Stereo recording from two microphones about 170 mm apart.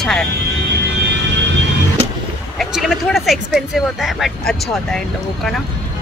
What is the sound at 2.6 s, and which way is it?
A woman's voice, centre (ahead or behind).